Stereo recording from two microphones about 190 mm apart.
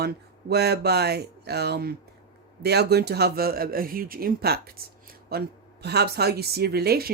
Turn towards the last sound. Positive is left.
turn(degrees=-55)  # may be behind; listen again after turning